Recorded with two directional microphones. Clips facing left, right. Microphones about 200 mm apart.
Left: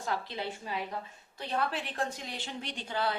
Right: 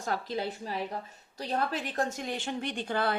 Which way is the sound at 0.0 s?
45° right (ahead or behind).